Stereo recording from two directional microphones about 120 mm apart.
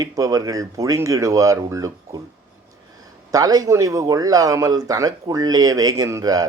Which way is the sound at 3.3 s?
30° right (ahead or behind).